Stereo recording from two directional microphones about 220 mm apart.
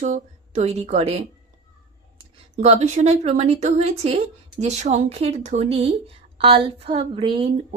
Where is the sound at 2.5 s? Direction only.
30° right (ahead or behind).